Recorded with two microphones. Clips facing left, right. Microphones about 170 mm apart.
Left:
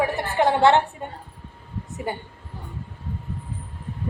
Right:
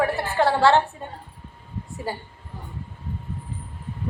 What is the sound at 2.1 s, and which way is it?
Female singing, 20° left (ahead or behind).